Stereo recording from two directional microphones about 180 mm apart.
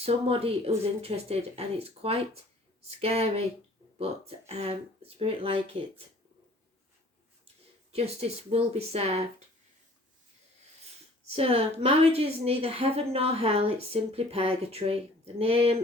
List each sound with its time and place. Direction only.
0.0 s a woman's voice: 35° right (ahead or behind)
7.9 s a woman's voice: 35° right (ahead or behind)
11.3 s a woman's voice: 35° right (ahead or behind)